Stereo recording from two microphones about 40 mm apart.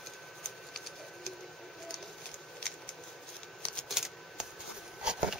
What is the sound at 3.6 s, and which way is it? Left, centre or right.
Typewriter, left.